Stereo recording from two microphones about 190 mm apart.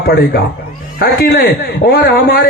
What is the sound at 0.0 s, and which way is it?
Speech, 55° left (ahead or behind).